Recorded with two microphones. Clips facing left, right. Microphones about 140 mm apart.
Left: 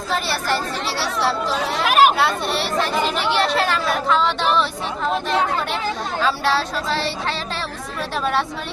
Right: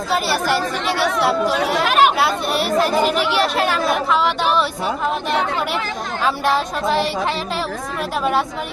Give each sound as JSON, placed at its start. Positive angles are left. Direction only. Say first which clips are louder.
{"t": 0.1, "sound": "speech", "louder": "right 3 dB", "side_deg": -10}
{"t": 1.9, "sound": "chatter", "louder": "left 2 dB", "side_deg": 5}
{"t": 2.1, "sound": "speech", "louder": "right 2 dB", "side_deg": -10}
{"t": 6.2, "sound": "speech", "louder": "right 2 dB", "side_deg": -15}